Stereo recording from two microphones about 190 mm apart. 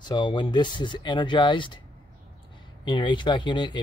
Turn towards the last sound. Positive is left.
turn(degrees=25)  # may be behind; listen again after turning